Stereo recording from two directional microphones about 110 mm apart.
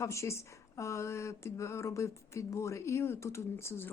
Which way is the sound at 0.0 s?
25° left (ahead or behind).